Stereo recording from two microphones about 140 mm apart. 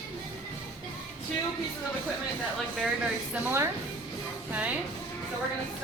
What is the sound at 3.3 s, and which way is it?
A woman's voice, 15° right (ahead or behind).